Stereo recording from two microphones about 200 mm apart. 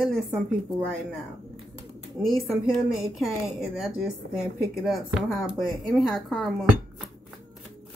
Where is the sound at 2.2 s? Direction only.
Centre (ahead or behind).